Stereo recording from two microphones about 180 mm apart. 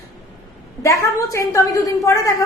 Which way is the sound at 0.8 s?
15° left (ahead or behind).